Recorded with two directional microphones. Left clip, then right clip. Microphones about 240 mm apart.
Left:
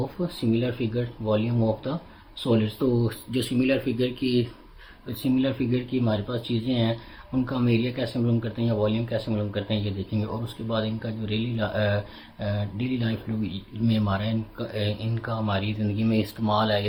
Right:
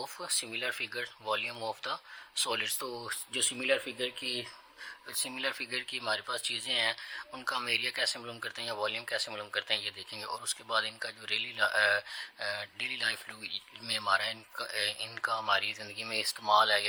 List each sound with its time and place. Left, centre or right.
0.0 s speech: right